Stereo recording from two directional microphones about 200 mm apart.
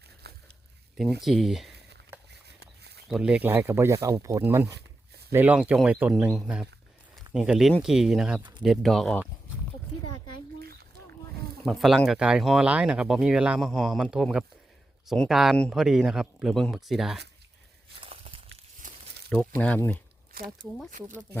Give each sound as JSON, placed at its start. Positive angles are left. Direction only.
{"t": 1.2, "sound": "speech", "side_deg": 0}
{"t": 2.6, "sound": "a sound", "side_deg": -55}
{"t": 3.1, "sound": "speech", "side_deg": -5}
{"t": 8.4, "sound": "speech", "side_deg": -25}
{"t": 8.6, "sound": "speech", "side_deg": 0}
{"t": 10.6, "sound": "a sound", "side_deg": -50}
{"t": 11.6, "sound": "speech", "side_deg": 0}
{"t": 18.0, "sound": "a sound", "side_deg": -30}
{"t": 19.4, "sound": "speech", "side_deg": 5}
{"t": 20.3, "sound": "speech", "side_deg": -50}